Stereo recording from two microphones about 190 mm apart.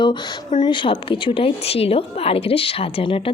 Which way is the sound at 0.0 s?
25° left (ahead or behind).